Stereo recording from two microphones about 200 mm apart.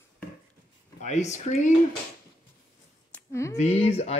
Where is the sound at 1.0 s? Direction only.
35° left (ahead or behind).